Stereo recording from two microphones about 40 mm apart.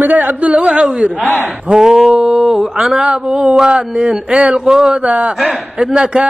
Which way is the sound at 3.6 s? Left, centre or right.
Centre.